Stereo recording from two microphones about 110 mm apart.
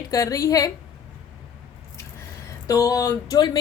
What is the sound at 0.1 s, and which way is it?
Speech, 30° left (ahead or behind).